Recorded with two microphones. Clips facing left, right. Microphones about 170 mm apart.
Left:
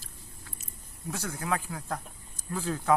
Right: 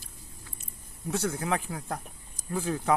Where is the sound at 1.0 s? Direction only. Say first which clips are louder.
Right 3 dB; 25° right (ahead or behind).